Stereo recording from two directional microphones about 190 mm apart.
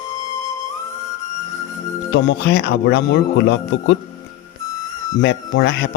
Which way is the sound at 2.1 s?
70° left (ahead or behind).